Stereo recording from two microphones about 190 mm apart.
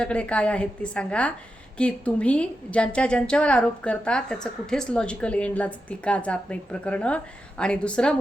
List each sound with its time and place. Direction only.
0.0 s a woman's voice: 5° left (ahead or behind)